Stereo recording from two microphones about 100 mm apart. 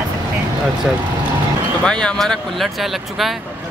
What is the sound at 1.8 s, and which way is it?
Speech, 10° left (ahead or behind).